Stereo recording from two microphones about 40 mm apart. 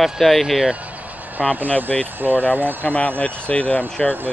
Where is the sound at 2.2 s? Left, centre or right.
Right.